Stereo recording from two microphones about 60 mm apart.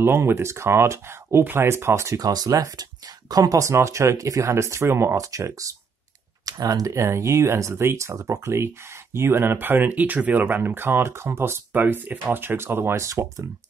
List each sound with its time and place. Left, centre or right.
0.0 s speech: right
2.1 s speech: right
5.1 s speech: right
6.4 s speech: right
6.9 s speech: right
11.7 s speech: right
13.0 s speech: right